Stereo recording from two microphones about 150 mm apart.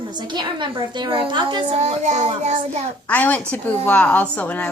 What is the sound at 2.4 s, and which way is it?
Child singing, 55° right (ahead or behind).